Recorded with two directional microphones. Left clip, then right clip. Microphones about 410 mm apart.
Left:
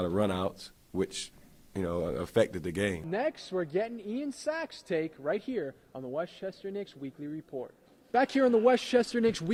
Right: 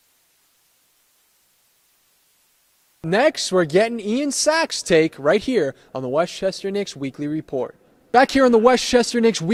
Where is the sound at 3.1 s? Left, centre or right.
Right.